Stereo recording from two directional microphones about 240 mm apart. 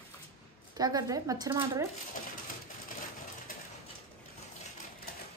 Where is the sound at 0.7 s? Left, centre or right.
Centre.